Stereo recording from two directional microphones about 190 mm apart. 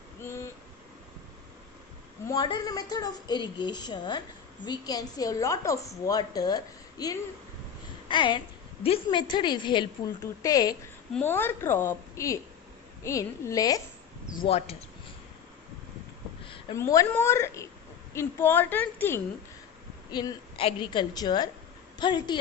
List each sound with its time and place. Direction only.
0.2 s a sound: 15° left (ahead or behind)
2.2 s a woman's voice: 20° left (ahead or behind)
14.4 s speech: 30° left (ahead or behind)
16.7 s a woman's voice: 15° left (ahead or behind)
20.1 s a woman's voice: 20° left (ahead or behind)